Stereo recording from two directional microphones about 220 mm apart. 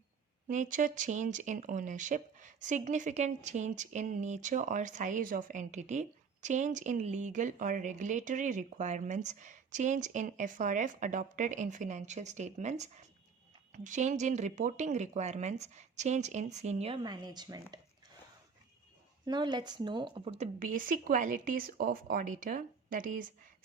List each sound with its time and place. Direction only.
0.4 s speech: 35° right (ahead or behind); by 17.7 s 20° right (ahead or behind)
19.2 s speech: 20° right (ahead or behind); by 23.2 s 40° right (ahead or behind)